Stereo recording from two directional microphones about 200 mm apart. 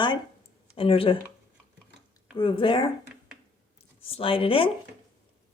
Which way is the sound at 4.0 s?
25° left (ahead or behind).